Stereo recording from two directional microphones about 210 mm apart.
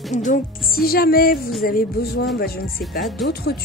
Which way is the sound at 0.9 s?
45° left (ahead or behind).